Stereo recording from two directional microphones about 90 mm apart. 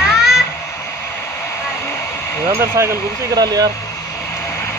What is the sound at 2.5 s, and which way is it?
Speech, 30° right (ahead or behind).